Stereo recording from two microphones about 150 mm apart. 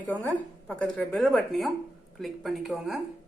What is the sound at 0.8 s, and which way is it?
Speech, 5° left (ahead or behind).